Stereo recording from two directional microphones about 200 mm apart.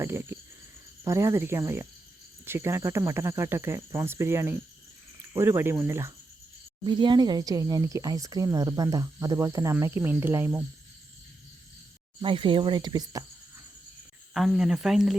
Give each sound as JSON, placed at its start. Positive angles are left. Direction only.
{"t": 0.0, "sound": "speech", "side_deg": -10}
{"t": 12.2, "sound": "speech", "side_deg": -25}
{"t": 14.3, "sound": "speech", "side_deg": 0}